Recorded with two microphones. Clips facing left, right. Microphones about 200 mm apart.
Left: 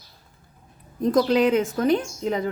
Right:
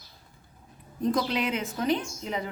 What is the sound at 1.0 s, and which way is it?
A woman's voice, 40° left (ahead or behind).